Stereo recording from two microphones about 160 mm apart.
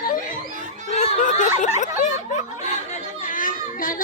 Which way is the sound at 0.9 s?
45° left (ahead or behind).